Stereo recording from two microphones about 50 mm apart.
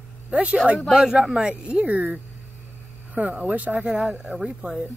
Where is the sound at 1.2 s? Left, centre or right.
Centre.